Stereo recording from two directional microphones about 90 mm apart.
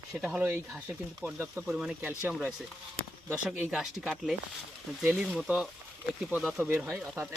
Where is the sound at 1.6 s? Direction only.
10° right (ahead or behind).